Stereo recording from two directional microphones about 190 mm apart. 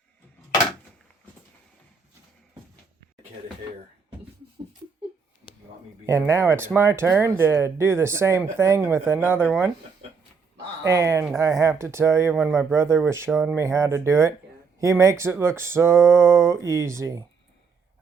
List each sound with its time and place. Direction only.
6.1 s speech: 15° right (ahead or behind)
9.4 s speech: centre (ahead or behind)
10.0 s a sound: 35° right (ahead or behind)
10.8 s speech: 15° right (ahead or behind)
12.3 s speech: centre (ahead or behind)
12.5 s speech: 15° right (ahead or behind)